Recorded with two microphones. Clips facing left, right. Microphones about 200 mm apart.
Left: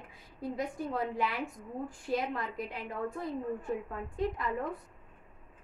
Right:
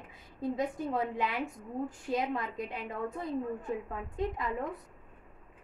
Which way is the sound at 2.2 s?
20° right (ahead or behind).